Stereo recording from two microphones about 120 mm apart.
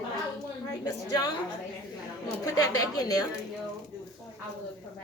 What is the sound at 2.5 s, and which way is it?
Speech, 30° left (ahead or behind).